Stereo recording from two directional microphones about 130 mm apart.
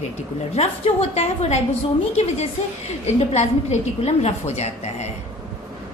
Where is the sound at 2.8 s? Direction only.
55° left (ahead or behind).